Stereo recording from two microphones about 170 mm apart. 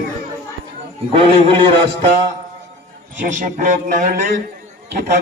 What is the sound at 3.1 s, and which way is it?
A man's voice, 50° right (ahead or behind).